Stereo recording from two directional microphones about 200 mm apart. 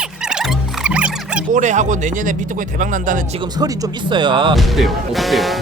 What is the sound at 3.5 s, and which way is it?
Speech, 20° right (ahead or behind).